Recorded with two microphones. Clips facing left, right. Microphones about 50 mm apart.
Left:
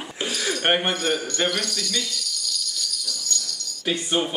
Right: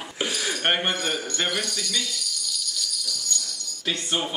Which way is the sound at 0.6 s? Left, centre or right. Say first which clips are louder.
Left 3 dB; centre.